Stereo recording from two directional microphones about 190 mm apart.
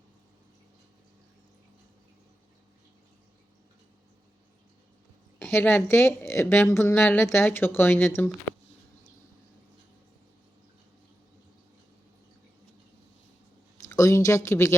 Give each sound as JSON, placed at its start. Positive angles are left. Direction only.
{"t": 5.4, "sound": "speech", "side_deg": 5}
{"t": 13.8, "sound": "speech", "side_deg": 15}